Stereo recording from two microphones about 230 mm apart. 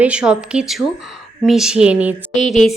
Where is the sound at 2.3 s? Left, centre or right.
Left.